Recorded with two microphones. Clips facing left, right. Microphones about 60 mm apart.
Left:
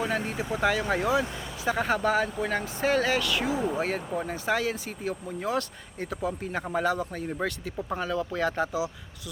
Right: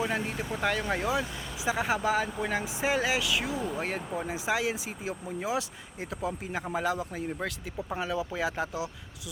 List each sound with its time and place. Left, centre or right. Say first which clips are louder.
0.3 s speech: left 4 dB; centre